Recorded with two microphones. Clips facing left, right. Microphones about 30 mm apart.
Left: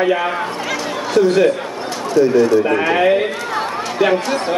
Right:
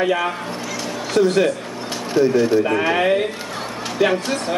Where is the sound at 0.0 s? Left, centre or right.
Centre.